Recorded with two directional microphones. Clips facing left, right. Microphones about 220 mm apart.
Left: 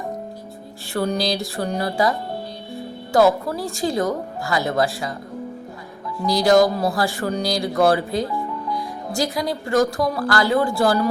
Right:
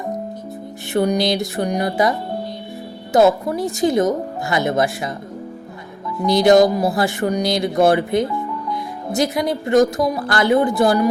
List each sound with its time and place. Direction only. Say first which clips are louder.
0.9 s music: right 5 dB; 20° right (ahead or behind)
3.4 s speech: right 5 dB; 20° right (ahead or behind)
6.2 s speech: right 3 dB; 20° right (ahead or behind)